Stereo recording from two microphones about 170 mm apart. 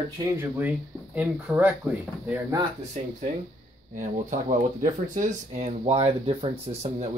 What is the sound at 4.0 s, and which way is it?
Speech, 45° right (ahead or behind).